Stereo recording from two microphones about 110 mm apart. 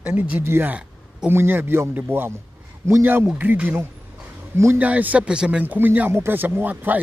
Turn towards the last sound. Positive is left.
turn(degrees=-15)  # may be behind; listen again after turning